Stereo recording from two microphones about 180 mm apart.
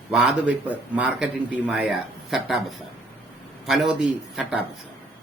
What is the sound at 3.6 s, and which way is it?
Speech, centre (ahead or behind).